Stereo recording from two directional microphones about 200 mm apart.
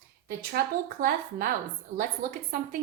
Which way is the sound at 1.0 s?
45° right (ahead or behind).